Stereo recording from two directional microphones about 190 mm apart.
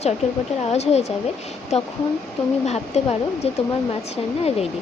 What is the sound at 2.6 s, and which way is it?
Speech, 35° left (ahead or behind).